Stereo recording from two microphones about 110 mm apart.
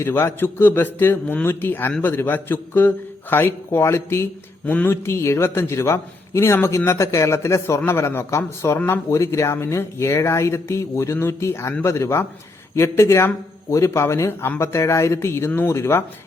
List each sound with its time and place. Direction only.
0.0 s a man's voice: 25° left (ahead or behind)